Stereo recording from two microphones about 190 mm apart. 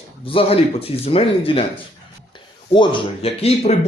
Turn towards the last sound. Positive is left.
turn(degrees=30)  # may be behind; listen again after turning